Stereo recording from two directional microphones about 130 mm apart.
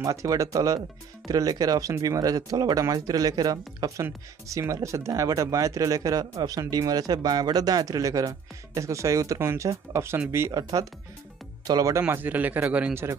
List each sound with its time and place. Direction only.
0.0 s speech: 25° right (ahead or behind)
11.6 s speech: 25° right (ahead or behind)
12.0 s speech: 15° right (ahead or behind)